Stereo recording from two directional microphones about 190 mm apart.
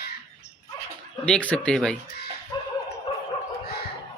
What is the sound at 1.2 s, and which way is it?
Speech, 5° left (ahead or behind).